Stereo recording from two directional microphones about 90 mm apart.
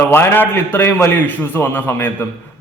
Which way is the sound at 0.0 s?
25° left (ahead or behind).